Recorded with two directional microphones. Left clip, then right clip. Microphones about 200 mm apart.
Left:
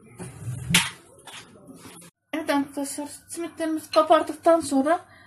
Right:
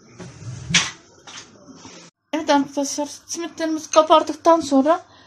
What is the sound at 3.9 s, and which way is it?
Speech, 45° right (ahead or behind).